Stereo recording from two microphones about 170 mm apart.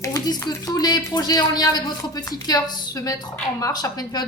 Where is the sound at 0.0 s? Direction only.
20° left (ahead or behind).